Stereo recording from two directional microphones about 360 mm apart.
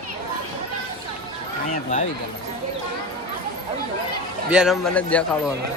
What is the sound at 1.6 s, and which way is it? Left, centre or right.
Speech, centre.